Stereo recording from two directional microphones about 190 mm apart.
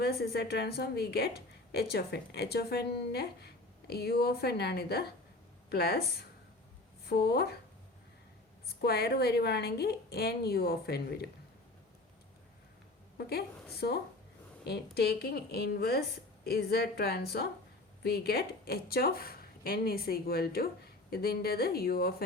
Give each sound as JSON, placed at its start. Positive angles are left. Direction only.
{"t": 0.0, "sound": "speech", "side_deg": 55}
{"t": 8.6, "sound": "speech", "side_deg": 55}
{"t": 13.1, "sound": "a woman's voice", "side_deg": 55}